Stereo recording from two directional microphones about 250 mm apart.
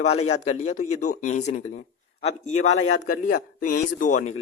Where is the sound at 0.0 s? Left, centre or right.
Left.